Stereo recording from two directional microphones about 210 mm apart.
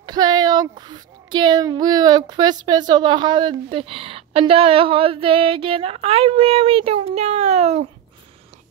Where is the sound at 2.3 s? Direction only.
20° right (ahead or behind).